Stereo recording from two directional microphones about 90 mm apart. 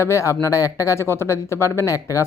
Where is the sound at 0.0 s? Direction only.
30° left (ahead or behind).